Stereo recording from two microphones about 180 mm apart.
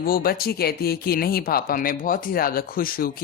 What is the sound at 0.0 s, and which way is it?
Speech, 55° left (ahead or behind).